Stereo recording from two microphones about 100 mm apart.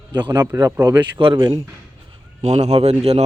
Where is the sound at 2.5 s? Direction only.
90° right.